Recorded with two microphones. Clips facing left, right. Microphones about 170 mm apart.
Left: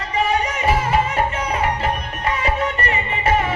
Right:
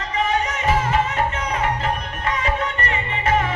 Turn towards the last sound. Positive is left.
turn(degrees=10)  # may be behind; listen again after turning